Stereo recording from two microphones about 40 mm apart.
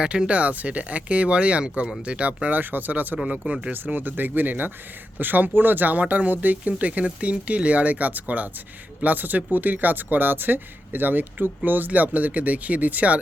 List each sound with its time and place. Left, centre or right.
0.0 s speech: right
2.5 s speech: right
3.2 s speech: right
3.8 s speech: right